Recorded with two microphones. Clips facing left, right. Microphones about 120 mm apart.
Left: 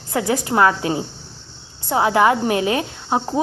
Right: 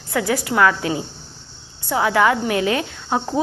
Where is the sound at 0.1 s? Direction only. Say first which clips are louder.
Left 1 dB; 20° left (ahead or behind).